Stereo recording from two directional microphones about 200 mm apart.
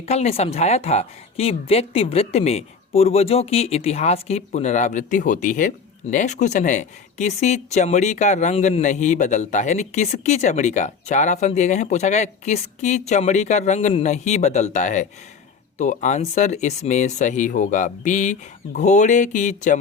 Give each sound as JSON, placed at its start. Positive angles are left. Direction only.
{"t": 0.0, "sound": "speech", "side_deg": 30}